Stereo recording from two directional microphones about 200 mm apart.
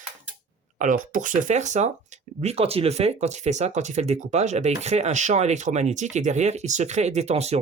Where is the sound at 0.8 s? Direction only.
40° right (ahead or behind).